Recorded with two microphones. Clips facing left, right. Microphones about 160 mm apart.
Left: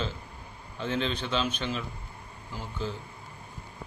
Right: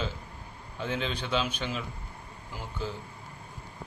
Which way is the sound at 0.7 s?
10° right (ahead or behind).